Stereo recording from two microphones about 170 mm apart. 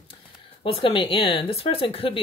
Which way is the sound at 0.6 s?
30° left (ahead or behind).